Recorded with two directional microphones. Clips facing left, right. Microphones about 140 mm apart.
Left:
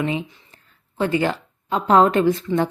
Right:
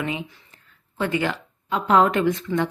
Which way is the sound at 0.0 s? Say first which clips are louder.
Left 4 dB; 30° left (ahead or behind).